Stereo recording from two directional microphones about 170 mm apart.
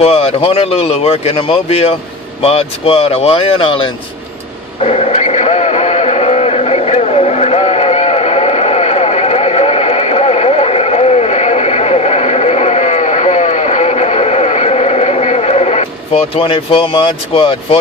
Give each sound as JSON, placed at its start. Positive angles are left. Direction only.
{"t": 0.0, "sound": "speech", "side_deg": 35}
{"t": 4.8, "sound": "radio", "side_deg": 40}